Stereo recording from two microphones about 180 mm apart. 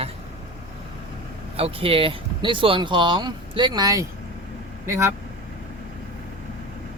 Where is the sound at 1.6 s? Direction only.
30° right (ahead or behind); by 5.1 s 15° right (ahead or behind).